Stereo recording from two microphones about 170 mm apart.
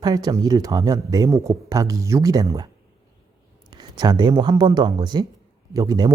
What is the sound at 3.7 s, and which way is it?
Speech, 25° right (ahead or behind).